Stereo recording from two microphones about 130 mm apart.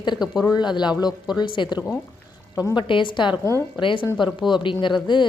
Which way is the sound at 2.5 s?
25° left (ahead or behind).